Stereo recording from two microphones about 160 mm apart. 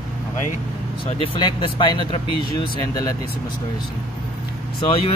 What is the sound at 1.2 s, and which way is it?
Speech, 30° left (ahead or behind).